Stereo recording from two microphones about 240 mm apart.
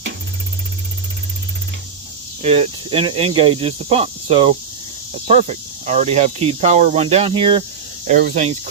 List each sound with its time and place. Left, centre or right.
2.4 s speech: right
8.0 s speech: right